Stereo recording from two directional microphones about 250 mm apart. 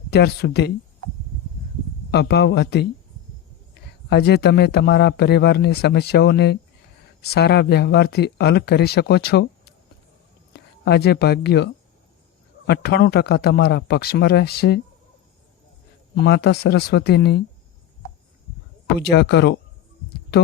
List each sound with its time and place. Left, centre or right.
0.1 s speech: left
2.0 s speech: left
4.1 s speech: left
10.5 s speech: left
16.2 s speech: left
19.1 s speech: left